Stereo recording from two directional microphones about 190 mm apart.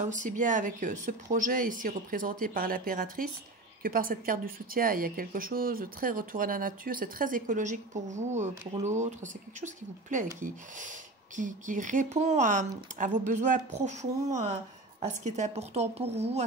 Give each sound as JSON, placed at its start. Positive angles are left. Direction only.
{"t": 0.0, "sound": "speech", "side_deg": -40}